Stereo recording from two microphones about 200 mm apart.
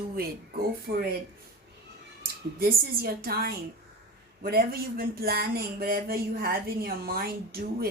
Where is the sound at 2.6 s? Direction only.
50° right (ahead or behind).